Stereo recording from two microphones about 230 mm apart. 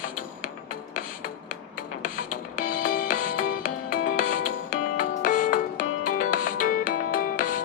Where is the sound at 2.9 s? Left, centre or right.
Left.